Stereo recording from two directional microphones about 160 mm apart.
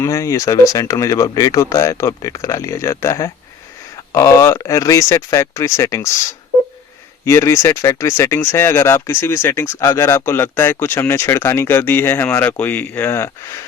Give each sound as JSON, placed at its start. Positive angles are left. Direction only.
{"t": 0.0, "sound": "speech", "side_deg": 20}
{"t": 7.3, "sound": "speech", "side_deg": 15}